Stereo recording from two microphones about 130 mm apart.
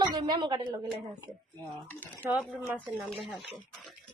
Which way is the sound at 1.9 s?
20° left (ahead or behind).